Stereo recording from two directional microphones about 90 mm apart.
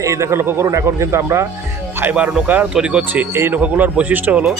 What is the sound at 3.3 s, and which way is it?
Speech, 30° right (ahead or behind).